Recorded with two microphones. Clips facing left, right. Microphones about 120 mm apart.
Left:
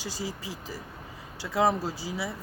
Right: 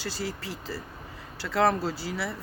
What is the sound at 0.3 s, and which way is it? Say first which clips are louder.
Speech: right 2 dB; 65° right (ahead or behind).